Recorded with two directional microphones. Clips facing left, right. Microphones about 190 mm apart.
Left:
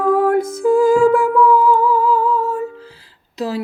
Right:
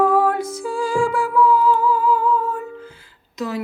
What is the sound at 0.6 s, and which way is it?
Music, 50° left (ahead or behind).